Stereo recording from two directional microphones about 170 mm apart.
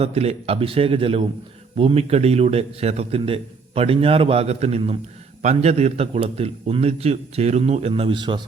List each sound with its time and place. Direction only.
0.0 s a man's voice: 35° right (ahead or behind)